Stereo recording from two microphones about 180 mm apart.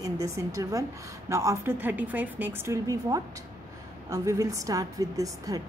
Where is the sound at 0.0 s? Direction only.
15° right (ahead or behind).